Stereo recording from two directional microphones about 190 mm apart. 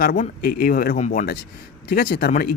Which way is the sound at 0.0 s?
50° left (ahead or behind).